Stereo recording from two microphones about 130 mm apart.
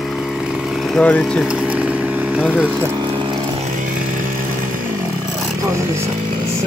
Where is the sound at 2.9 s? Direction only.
35° right (ahead or behind).